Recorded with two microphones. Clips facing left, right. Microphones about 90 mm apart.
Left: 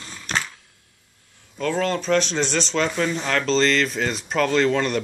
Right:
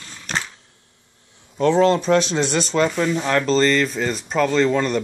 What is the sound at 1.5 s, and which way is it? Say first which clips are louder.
Speech: right 7 dB; 25° right (ahead or behind).